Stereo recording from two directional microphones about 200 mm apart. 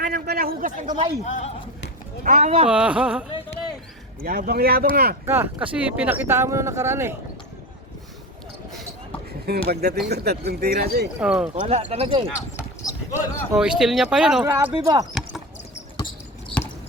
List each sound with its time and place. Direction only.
0.0 s speech: 50° right (ahead or behind)
1.2 s speech: 35° left (ahead or behind)
2.2 s speech: 35° right (ahead or behind)
2.6 s speech: 5° right (ahead or behind)
4.2 s speech: 50° right (ahead or behind)
5.2 s speech: 10° right (ahead or behind)
9.5 s speech: 50° right (ahead or behind)
11.2 s speech: 5° right (ahead or behind)
11.5 s speech: 35° right (ahead or behind)
13.1 s speech: 5° right (ahead or behind)
14.4 s speech: 20° right (ahead or behind)